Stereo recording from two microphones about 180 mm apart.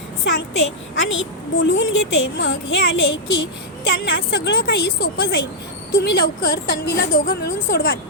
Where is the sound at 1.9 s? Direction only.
85° left.